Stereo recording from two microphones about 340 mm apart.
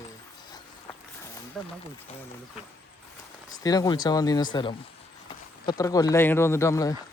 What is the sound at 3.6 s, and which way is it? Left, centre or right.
Speech, centre.